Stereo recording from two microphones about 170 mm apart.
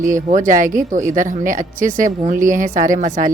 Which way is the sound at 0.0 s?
50° right (ahead or behind).